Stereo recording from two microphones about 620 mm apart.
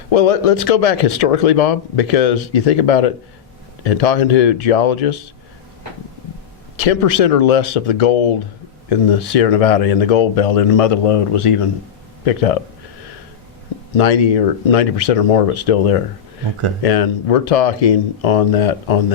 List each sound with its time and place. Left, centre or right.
0.1 s speech: left
6.7 s speech: left
12.2 s speech: left
13.9 s speech: left